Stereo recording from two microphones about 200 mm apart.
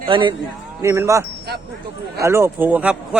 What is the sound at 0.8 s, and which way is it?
Speech, 15° right (ahead or behind).